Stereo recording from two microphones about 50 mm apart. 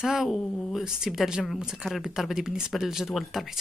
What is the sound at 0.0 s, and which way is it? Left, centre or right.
Speech, centre.